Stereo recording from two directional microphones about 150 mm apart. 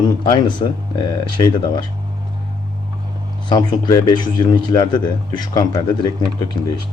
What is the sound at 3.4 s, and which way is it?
Speech, 25° left (ahead or behind).